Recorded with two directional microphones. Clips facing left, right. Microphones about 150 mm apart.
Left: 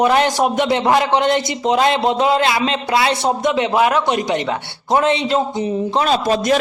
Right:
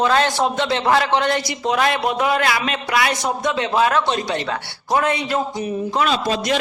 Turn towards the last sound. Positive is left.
turn(degrees=45)  # may be behind; listen again after turning